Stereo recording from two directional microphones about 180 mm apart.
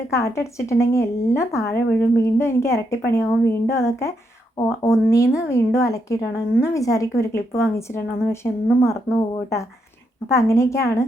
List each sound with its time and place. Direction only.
0.1 s speech: 15° left (ahead or behind)